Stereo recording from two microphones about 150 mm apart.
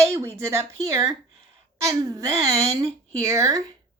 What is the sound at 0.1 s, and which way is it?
Speech, 20° right (ahead or behind).